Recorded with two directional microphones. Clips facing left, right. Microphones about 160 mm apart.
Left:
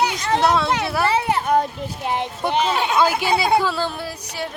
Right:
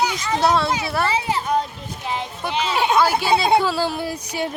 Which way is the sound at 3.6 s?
5° right (ahead or behind).